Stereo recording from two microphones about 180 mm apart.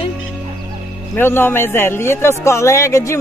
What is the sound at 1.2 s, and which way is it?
A man's voice, 10° left (ahead or behind).